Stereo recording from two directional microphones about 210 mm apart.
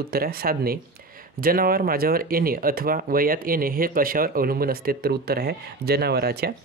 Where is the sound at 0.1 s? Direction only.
45° right (ahead or behind).